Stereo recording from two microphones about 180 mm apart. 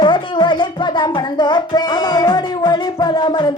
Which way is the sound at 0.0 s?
25° left (ahead or behind).